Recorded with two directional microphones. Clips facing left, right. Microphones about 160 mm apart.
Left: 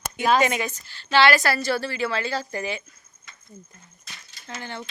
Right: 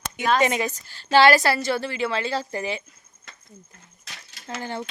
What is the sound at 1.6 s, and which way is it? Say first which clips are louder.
Speech: even; 20° right (ahead or behind).